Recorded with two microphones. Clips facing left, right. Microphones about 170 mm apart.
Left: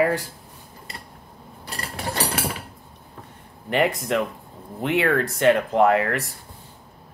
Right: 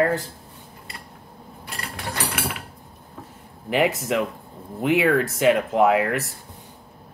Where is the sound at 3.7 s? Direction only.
Centre (ahead or behind).